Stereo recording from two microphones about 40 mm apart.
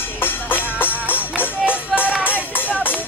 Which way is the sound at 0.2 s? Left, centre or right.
Left.